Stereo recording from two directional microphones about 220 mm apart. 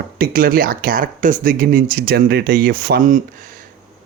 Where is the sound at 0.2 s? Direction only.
40° right (ahead or behind).